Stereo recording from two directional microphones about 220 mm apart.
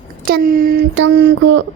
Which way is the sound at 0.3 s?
40° right (ahead or behind).